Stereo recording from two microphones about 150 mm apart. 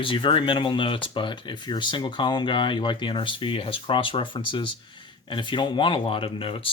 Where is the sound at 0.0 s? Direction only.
35° left (ahead or behind).